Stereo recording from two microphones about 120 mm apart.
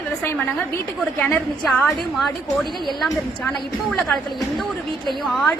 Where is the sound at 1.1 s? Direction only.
15° left (ahead or behind).